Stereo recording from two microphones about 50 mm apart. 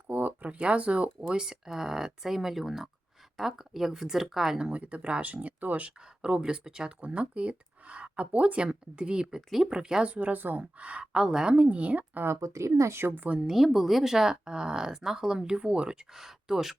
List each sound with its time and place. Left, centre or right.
0.1 s speech: right; by 4.7 s centre
4.7 s speech: right
6.2 s speech: centre
10.1 s speech: right
10.8 s speech: right
11.5 s speech: right
12.4 s speech: right
13.0 s a woman's voice: right
13.4 s speech: centre